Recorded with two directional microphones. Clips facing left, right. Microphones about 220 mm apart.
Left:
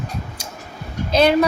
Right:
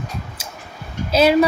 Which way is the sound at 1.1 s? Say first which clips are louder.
Right 1 dB; 5° right (ahead or behind).